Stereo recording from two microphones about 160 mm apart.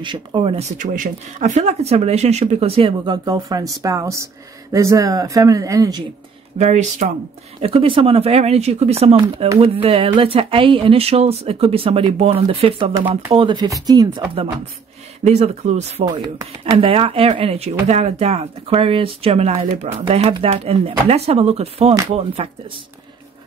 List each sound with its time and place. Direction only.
0.0 s speech: 30° right (ahead or behind)
6.6 s speech: 45° right (ahead or behind)
7.6 s speech: 35° right (ahead or behind)
15.2 s speech: 45° right (ahead or behind)
16.1 s speech: 25° right (ahead or behind)